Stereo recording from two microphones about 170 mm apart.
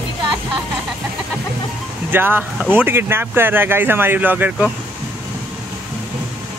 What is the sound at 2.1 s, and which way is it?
Speech, 10° right (ahead or behind).